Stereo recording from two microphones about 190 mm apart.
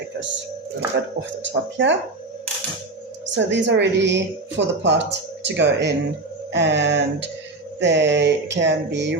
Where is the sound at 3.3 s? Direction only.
70° right (ahead or behind).